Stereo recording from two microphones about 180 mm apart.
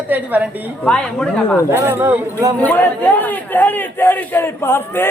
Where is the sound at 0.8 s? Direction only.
5° left (ahead or behind).